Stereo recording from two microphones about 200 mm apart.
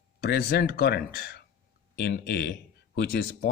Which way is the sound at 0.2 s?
55° left (ahead or behind).